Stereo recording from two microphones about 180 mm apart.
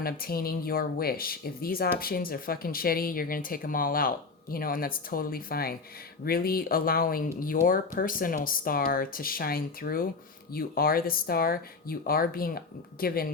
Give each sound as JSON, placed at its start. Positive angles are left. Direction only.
{"t": 0.0, "sound": "speech", "side_deg": 55}